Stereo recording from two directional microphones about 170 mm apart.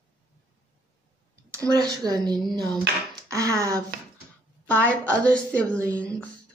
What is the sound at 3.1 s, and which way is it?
Finger snapping, 20° right (ahead or behind).